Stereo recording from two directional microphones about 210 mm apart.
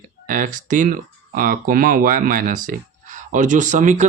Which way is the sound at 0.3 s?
40° right (ahead or behind).